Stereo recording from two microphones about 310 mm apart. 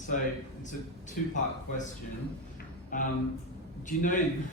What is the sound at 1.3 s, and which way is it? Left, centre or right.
Speech, left.